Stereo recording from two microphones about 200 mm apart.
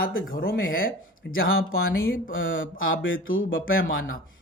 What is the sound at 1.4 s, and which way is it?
Speech, 85° left.